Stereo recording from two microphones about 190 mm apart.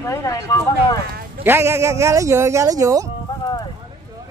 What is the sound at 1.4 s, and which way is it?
Speech, 10° right (ahead or behind).